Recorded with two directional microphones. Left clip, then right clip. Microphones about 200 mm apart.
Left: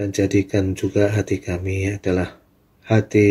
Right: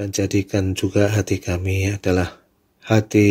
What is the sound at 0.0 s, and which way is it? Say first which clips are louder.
Speech: left 2 dB; 35° right (ahead or behind).